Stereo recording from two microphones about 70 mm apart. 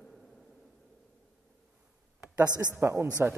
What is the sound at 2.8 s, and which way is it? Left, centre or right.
Speech, right.